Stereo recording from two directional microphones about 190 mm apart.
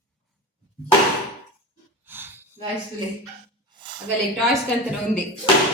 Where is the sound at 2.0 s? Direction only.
10° right (ahead or behind).